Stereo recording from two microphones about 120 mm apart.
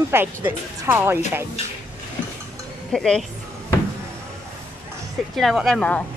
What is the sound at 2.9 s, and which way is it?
Speech, 5° left (ahead or behind).